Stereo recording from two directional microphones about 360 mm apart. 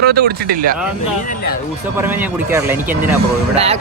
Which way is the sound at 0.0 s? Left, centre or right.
Right.